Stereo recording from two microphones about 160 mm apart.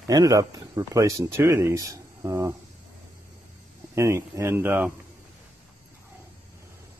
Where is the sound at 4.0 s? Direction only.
20° right (ahead or behind).